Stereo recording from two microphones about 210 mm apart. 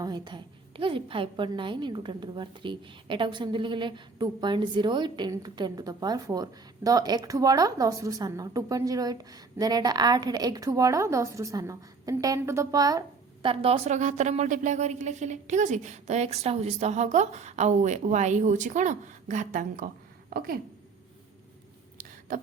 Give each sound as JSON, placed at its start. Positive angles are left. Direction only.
{"t": 0.0, "sound": "a woman's voice", "side_deg": -20}